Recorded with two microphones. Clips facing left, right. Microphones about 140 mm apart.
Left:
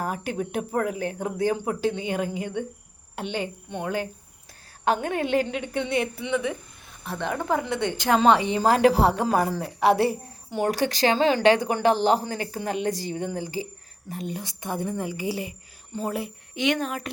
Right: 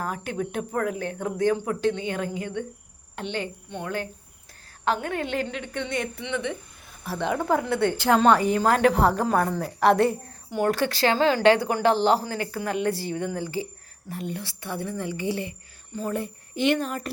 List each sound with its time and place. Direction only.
0.0 s speech: 15° left (ahead or behind); by 8.0 s 5° right (ahead or behind)
8.0 s speech: 5° left (ahead or behind)
8.6 s a woman's voice: 30° left (ahead or behind)
9.3 s speech: 5° left (ahead or behind)
15.9 s a woman's voice: 20° left (ahead or behind)
16.6 s speech: centre (ahead or behind)